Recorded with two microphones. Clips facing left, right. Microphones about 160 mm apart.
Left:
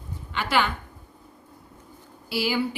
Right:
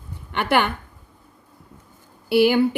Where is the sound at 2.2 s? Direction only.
60° right (ahead or behind).